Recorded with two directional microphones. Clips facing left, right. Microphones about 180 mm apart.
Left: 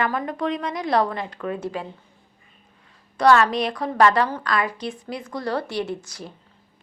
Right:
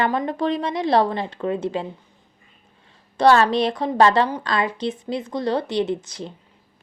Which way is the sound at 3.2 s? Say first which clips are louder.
Right 2 dB; 30° right (ahead or behind).